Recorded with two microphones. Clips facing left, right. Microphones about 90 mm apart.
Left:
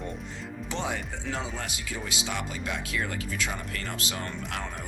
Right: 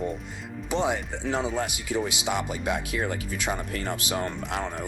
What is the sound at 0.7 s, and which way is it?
Speech, 15° right (ahead or behind).